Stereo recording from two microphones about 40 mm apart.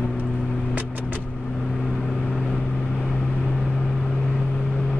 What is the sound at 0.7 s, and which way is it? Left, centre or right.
Vehicle, right.